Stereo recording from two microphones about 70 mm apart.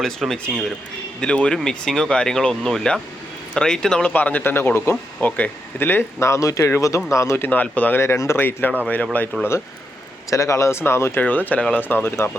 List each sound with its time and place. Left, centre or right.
0.0 s speech: centre
4.1 s speech: left
7.4 s speech: left
8.0 s speech: left
10.2 s speech: left
11.1 s speech: left